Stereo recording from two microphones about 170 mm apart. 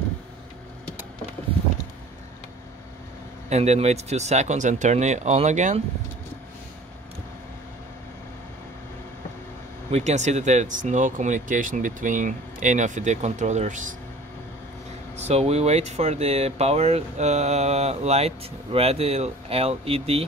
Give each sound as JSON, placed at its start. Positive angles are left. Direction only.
{"t": 3.4, "sound": "speech", "side_deg": -40}
{"t": 9.8, "sound": "speech", "side_deg": -40}
{"t": 15.1, "sound": "speech", "side_deg": -40}